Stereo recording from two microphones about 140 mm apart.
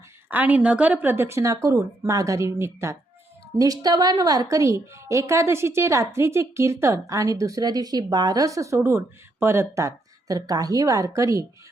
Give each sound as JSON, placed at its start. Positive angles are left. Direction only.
{"t": 0.3, "sound": "a woman's voice", "side_deg": -10}